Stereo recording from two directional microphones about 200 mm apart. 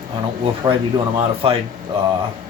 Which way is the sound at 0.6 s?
20° right (ahead or behind).